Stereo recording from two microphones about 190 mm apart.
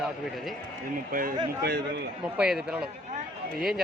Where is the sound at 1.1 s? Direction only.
45° right (ahead or behind).